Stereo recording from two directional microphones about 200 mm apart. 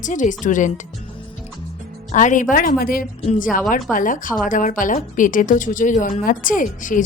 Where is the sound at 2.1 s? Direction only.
40° left (ahead or behind).